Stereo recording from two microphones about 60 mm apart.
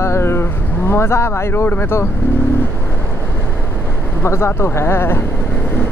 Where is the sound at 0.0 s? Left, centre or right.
Left.